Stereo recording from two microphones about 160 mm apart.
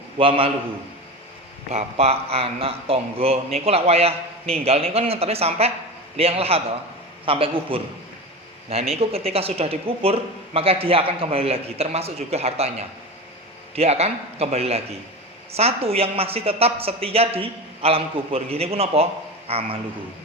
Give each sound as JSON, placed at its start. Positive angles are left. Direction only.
{"t": 0.2, "sound": "speech", "side_deg": -35}
{"t": 1.7, "sound": "speech", "side_deg": -40}